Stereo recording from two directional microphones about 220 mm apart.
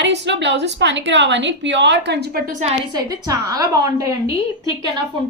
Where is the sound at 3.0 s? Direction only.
15° right (ahead or behind).